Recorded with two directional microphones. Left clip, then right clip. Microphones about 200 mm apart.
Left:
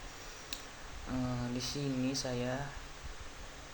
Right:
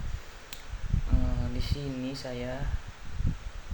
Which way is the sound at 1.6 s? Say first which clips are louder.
Even; 5° left (ahead or behind).